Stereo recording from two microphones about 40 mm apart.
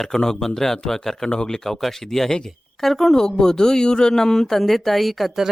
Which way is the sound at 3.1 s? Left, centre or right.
Centre.